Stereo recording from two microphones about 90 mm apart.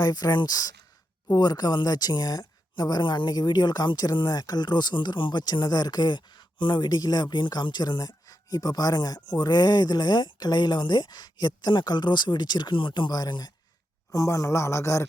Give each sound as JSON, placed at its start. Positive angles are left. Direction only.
{"t": 0.0, "sound": "speech", "side_deg": 50}